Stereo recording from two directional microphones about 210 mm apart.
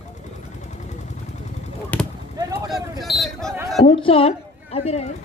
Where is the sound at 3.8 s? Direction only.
25° left (ahead or behind).